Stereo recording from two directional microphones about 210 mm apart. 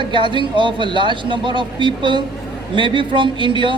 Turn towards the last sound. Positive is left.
turn(degrees=-25)  # may be behind; listen again after turning